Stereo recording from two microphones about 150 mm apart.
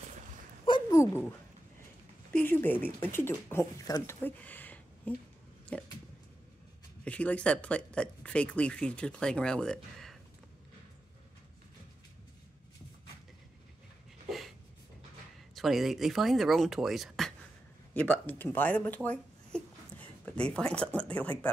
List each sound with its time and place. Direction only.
0.7 s a sound: 30° left (ahead or behind)
2.3 s speech: 15° left (ahead or behind)
7.1 s speech: 10° left (ahead or behind)
15.5 s speech: centre (ahead or behind)
17.9 s speech: 10° left (ahead or behind)